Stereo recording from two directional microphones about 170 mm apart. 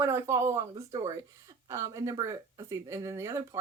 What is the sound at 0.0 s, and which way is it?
Speech, 15° right (ahead or behind).